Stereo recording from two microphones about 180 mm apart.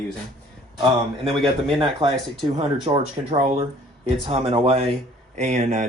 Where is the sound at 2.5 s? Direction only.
35° right (ahead or behind).